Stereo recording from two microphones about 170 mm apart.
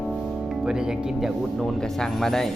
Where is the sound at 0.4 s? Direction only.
5° right (ahead or behind).